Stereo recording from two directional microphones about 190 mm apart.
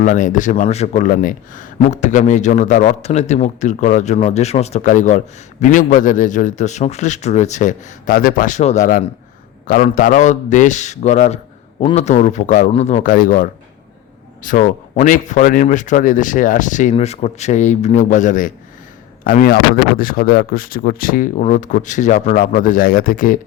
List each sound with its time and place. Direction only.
0.0 s speech: 40° left (ahead or behind)
9.6 s speech: 50° left (ahead or behind)